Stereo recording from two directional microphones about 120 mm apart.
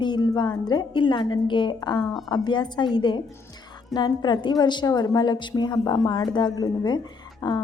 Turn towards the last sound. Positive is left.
turn(degrees=40)  # may be behind; listen again after turning